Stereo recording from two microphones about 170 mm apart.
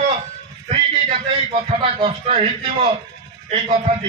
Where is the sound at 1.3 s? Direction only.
35° right (ahead or behind).